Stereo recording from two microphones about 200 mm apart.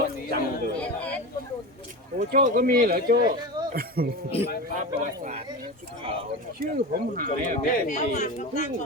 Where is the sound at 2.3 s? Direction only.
45° right (ahead or behind).